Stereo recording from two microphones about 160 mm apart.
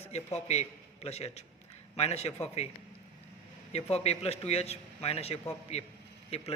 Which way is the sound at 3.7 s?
40° left (ahead or behind).